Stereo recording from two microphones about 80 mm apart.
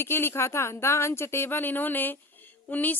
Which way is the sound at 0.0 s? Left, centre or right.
Left.